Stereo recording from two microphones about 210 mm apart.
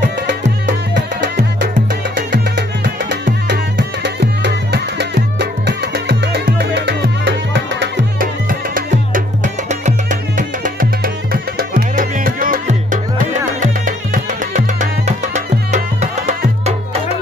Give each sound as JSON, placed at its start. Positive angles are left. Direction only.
{"t": 0.9, "sound": "music", "side_deg": -55}
{"t": 8.2, "sound": "music", "side_deg": -40}